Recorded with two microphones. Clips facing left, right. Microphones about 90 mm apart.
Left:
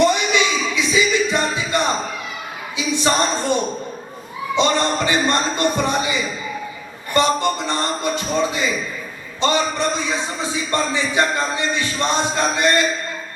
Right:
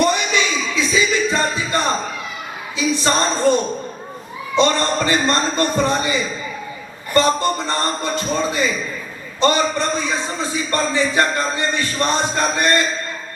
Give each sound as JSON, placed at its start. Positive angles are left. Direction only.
{"t": 0.0, "sound": "music", "side_deg": 20}
{"t": 2.7, "sound": "a man's voice", "side_deg": 20}